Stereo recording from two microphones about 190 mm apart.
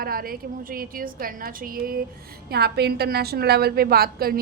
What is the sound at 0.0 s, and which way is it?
A woman's voice, 50° right (ahead or behind).